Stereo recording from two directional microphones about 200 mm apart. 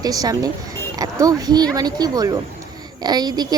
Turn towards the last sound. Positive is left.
turn(degrees=-20)  # may be behind; listen again after turning